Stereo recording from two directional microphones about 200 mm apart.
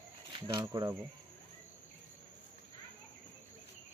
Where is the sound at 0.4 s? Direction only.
20° right (ahead or behind).